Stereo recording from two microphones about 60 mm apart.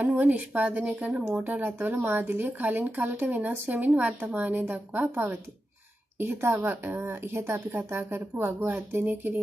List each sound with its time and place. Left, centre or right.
0.0 s speech: right
6.1 s a woman's voice: right
6.6 s a woman's voice: right
8.5 s speech: right